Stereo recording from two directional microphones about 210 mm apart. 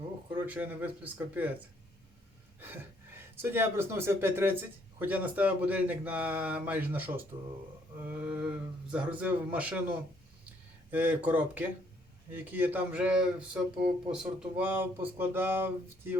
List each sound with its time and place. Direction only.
0.3 s speech: 10° right (ahead or behind)
2.6 s speech: 10° right (ahead or behind)
10.9 s speech: 10° right (ahead or behind)